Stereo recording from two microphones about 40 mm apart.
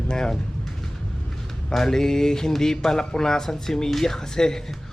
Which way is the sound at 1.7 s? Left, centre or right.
Centre.